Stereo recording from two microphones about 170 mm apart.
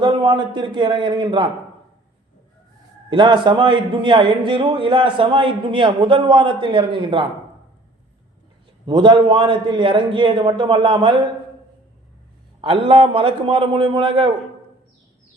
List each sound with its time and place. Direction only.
0.0 s a man's voice: 30° right (ahead or behind)
3.1 s a man's voice: 30° right (ahead or behind)
8.9 s a man's voice: 25° right (ahead or behind)
12.6 s a man's voice: 30° right (ahead or behind)